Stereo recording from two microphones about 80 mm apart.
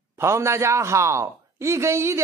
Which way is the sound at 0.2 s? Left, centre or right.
Right.